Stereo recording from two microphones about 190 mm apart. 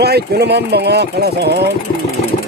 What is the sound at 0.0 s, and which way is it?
Speech, 60° right (ahead or behind).